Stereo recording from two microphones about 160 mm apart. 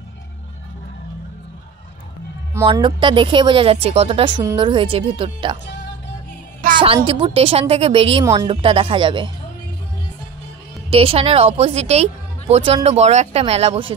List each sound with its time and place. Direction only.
2.6 s a woman's voice: 30° right (ahead or behind)
4.4 s a woman's voice: 25° right (ahead or behind)
7.1 s a woman's voice: 35° right (ahead or behind)
10.9 s a woman's voice: 35° right (ahead or behind)